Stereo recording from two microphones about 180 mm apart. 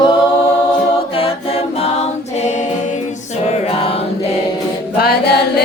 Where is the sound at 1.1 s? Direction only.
30° left (ahead or behind).